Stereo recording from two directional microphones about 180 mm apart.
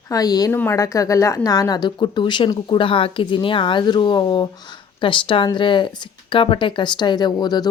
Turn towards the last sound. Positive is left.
turn(degrees=20)  # may be behind; listen again after turning